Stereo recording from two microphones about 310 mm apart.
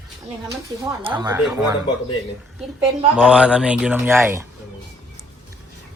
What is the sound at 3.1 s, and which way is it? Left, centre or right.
Speech, centre.